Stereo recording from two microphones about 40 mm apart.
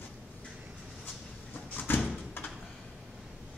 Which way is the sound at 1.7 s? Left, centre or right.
Left.